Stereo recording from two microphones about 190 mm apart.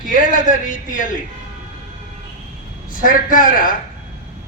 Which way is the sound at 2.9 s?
45° left (ahead or behind).